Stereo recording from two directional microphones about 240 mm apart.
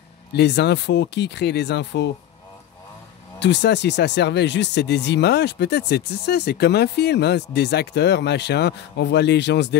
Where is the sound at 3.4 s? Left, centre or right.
Left.